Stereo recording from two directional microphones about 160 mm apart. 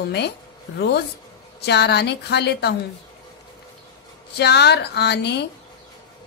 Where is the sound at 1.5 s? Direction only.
90° left.